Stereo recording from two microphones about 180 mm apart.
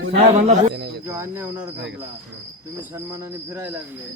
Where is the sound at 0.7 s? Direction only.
70° right (ahead or behind).